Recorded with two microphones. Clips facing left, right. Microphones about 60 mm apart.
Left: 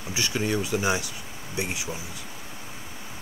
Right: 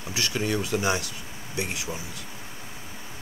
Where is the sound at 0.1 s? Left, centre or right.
Centre.